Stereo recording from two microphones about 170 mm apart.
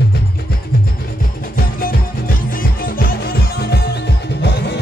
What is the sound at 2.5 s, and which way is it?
Music, 55° left (ahead or behind).